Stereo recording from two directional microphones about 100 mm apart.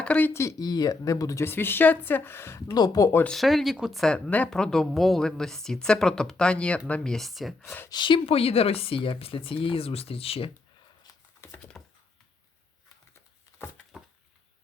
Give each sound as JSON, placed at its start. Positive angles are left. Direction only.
{"t": 0.0, "sound": "speech", "side_deg": 15}
{"t": 0.4, "sound": "speech", "side_deg": 40}
{"t": 1.5, "sound": "a woman's voice", "side_deg": 20}
{"t": 2.6, "sound": "speech", "side_deg": 40}
{"t": 3.2, "sound": "speech", "side_deg": 0}
{"t": 4.0, "sound": "speech", "side_deg": 15}
{"t": 7.9, "sound": "speech", "side_deg": 50}
{"t": 11.8, "sound": "chopping", "side_deg": 10}